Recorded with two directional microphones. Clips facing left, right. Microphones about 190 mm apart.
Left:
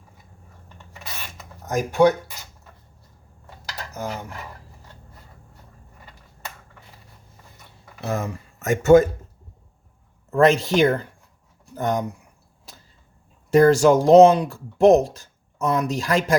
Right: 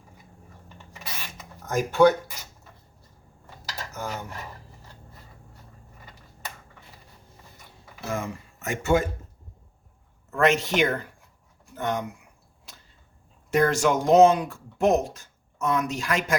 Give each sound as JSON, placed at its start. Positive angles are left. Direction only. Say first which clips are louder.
{"t": 1.6, "sound": "speech", "louder": "left 1 dB", "side_deg": 15}
{"t": 8.1, "sound": "speech", "louder": "left 3 dB", "side_deg": 45}
{"t": 10.3, "sound": "speech", "louder": "left 5 dB", "side_deg": 35}
{"t": 13.5, "sound": "speech", "louder": "left 7 dB", "side_deg": 35}